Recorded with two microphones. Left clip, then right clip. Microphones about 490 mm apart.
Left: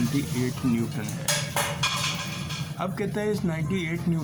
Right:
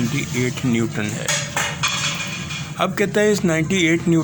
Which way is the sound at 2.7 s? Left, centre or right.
Centre.